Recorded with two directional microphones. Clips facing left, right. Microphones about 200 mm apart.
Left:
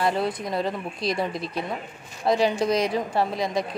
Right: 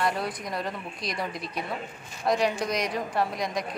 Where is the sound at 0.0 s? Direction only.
25° left (ahead or behind).